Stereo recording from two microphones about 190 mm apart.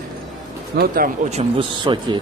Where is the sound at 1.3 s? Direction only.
25° right (ahead or behind).